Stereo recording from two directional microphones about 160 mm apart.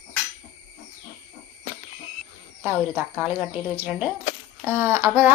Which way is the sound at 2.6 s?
10° right (ahead or behind).